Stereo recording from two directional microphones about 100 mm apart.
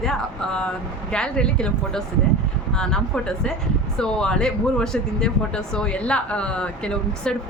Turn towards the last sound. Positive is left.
turn(degrees=10)  # may be behind; listen again after turning